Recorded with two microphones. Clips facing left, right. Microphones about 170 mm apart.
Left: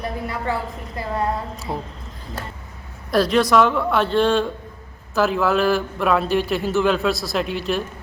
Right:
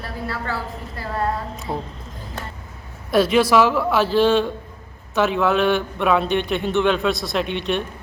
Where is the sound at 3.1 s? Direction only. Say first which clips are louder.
Right 1 dB; 5° right (ahead or behind).